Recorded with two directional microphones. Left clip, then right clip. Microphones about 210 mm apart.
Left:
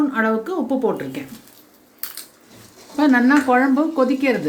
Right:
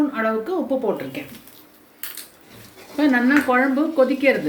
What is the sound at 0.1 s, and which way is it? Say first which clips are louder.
Speech: left 2 dB; 55° left (ahead or behind).